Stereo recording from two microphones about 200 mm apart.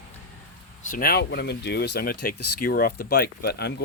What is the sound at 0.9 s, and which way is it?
Speech, 45° left (ahead or behind).